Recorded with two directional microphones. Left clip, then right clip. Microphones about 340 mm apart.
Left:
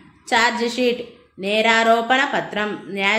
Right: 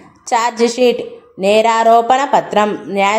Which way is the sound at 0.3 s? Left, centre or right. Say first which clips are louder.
Right 4 dB; right.